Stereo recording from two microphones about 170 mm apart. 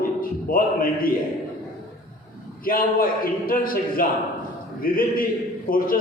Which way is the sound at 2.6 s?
55° left (ahead or behind).